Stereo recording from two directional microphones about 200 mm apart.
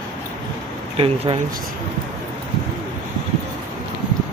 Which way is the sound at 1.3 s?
30° right (ahead or behind).